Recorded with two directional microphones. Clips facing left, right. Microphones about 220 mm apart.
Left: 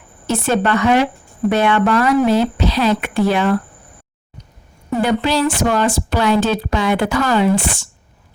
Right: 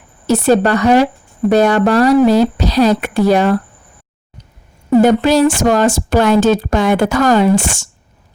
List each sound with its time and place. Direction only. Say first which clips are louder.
0.3 s a woman's voice: right 5 dB; 40° right (ahead or behind)
4.9 s a woman's voice: right 7 dB; 45° right (ahead or behind)